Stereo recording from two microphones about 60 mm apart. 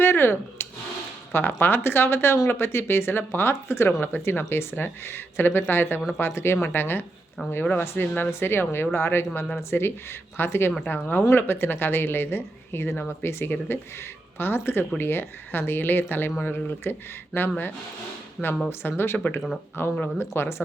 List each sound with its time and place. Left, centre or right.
0.0 s a sound: left
1.3 s speech: left
7.7 s speech: left
18.4 s speech: centre
18.7 s speech: left